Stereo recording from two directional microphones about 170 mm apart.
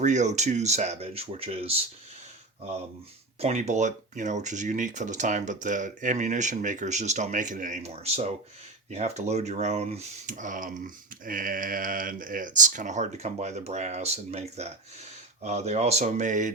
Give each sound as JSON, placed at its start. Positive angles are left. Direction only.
{"t": 0.0, "sound": "speech", "side_deg": -45}
{"t": 3.4, "sound": "speech", "side_deg": -40}